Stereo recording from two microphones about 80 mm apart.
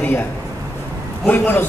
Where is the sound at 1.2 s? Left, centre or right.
Left.